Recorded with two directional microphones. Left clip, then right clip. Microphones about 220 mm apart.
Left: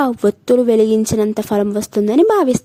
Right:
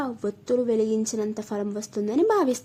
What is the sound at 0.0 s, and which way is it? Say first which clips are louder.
Speech: left 14 dB; 40° left (ahead or behind).